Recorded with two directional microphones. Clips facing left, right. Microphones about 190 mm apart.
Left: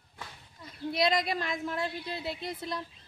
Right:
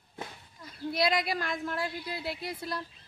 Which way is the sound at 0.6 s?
5° right (ahead or behind).